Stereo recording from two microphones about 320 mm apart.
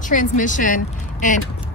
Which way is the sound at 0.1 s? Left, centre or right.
Left.